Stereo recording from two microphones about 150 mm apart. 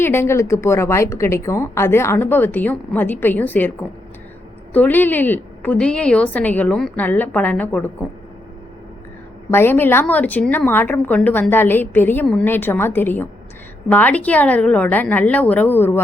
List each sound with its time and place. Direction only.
0.0 s a woman's voice: 15° left (ahead or behind)
9.5 s a woman's voice: 15° left (ahead or behind)